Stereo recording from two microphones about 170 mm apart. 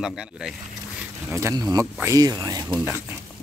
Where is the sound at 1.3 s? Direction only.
20° right (ahead or behind).